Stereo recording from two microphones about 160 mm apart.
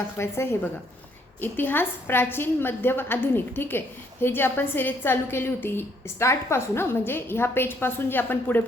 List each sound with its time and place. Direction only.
0.2 s a woman's voice: 15° left (ahead or behind)